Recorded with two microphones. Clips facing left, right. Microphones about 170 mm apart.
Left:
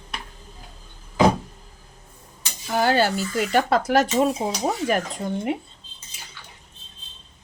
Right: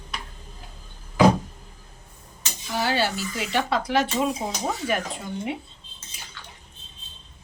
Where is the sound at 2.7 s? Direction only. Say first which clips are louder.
Left 5 dB; 50° left (ahead or behind).